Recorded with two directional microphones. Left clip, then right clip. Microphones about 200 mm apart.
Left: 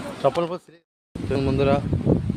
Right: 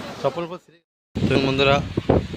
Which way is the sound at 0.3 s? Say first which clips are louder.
Left 5 dB; 20° left (ahead or behind).